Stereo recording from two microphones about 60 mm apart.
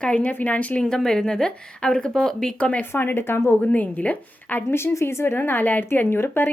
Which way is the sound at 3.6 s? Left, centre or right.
Left.